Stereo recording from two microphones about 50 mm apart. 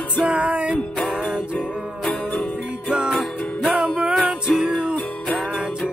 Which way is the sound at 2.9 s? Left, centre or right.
Centre.